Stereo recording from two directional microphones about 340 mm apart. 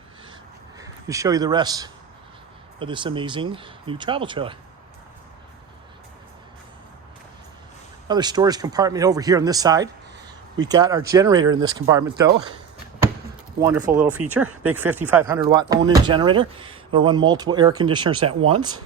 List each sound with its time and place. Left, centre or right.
0.8 s speech: centre
8.0 s speech: centre
13.6 s speech: centre